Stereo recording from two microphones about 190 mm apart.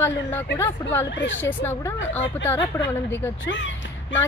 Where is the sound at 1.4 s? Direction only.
10° left (ahead or behind).